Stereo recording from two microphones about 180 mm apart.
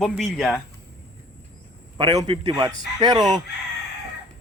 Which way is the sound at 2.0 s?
25° right (ahead or behind).